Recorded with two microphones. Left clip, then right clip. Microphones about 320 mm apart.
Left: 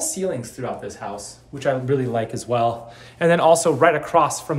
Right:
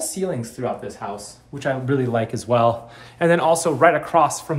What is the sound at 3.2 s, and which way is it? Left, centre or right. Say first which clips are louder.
Speech: left 2 dB; centre.